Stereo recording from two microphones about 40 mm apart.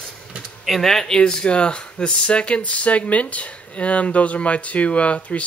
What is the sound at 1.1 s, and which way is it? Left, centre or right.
Speech, left.